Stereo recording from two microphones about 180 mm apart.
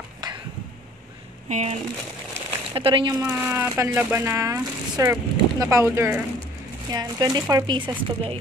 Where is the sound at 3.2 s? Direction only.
10° right (ahead or behind).